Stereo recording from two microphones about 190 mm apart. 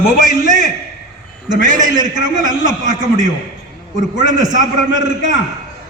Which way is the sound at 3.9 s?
40° right (ahead or behind).